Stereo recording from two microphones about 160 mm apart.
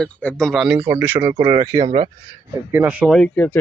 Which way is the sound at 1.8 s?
40° right (ahead or behind).